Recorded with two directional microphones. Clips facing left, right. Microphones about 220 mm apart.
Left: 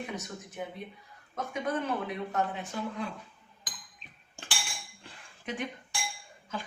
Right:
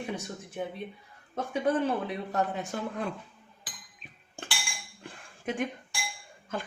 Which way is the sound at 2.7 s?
50° right (ahead or behind).